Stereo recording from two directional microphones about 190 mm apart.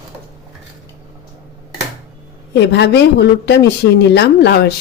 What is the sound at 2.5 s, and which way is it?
A woman's voice, 65° left (ahead or behind).